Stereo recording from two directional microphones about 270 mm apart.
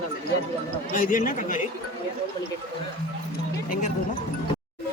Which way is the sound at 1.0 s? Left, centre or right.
Left.